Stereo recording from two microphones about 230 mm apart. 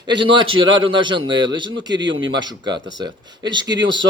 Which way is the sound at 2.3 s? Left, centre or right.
Centre.